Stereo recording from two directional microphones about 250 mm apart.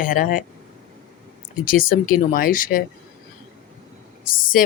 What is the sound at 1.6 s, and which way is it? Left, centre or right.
Speech, left.